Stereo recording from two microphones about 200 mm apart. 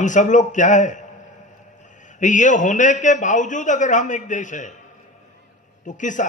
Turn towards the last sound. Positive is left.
turn(degrees=40)  # may be behind; listen again after turning